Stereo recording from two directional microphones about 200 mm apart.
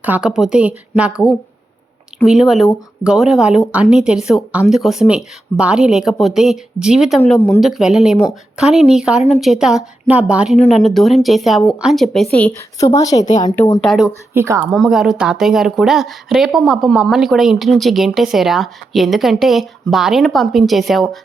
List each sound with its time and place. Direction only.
0.0 s a woman's voice: 5° right (ahead or behind)
12.8 s a woman's voice: 15° left (ahead or behind)
13.8 s a woman's voice: centre (ahead or behind)
14.3 s speech: 15° right (ahead or behind)
14.7 s a woman's voice: centre (ahead or behind)